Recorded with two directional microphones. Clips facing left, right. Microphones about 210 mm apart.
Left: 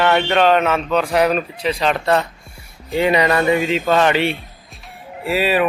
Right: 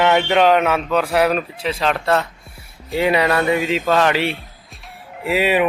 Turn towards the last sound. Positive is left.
turn(degrees=-15)  # may be behind; listen again after turning